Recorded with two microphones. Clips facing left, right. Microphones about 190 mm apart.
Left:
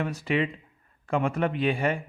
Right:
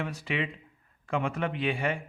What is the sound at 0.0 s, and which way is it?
Speech, 40° left (ahead or behind).